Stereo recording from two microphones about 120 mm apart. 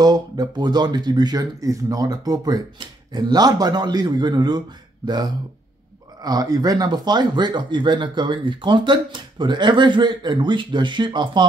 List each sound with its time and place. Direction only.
0.0 s speech: 35° right (ahead or behind)